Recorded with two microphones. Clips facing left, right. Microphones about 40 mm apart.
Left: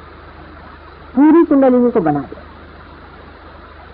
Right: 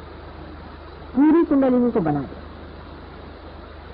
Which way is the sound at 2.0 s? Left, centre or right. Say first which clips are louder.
Left 7 dB; left.